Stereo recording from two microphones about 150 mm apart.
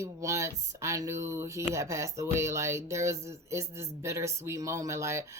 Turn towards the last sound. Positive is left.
turn(degrees=-20)  # may be behind; listen again after turning